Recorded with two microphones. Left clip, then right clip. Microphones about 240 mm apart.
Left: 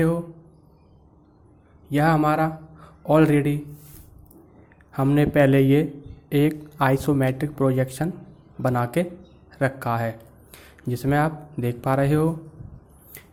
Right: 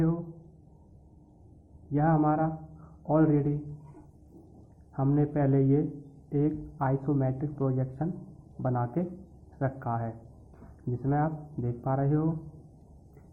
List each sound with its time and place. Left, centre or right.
1.9 s speech: left
4.9 s speech: left